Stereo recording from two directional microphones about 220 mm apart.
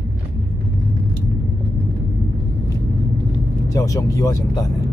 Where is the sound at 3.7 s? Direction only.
15° left (ahead or behind).